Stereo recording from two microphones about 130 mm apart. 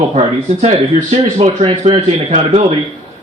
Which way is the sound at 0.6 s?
55° right (ahead or behind).